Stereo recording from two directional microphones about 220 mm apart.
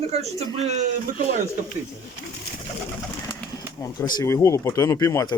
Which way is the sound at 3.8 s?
15° left (ahead or behind).